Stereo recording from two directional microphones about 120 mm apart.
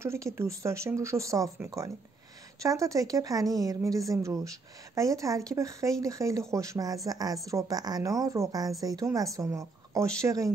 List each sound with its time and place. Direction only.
0.0 s speech: 25° right (ahead or behind)
2.6 s a woman's voice: 25° right (ahead or behind)